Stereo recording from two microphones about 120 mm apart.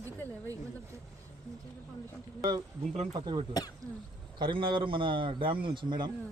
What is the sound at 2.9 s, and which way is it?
Speech, 60° right (ahead or behind).